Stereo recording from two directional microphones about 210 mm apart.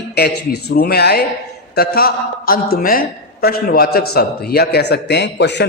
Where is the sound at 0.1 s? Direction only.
50° left (ahead or behind).